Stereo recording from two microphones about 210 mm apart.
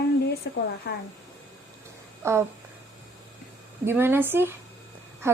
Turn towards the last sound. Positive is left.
turn(degrees=-10)  # may be behind; listen again after turning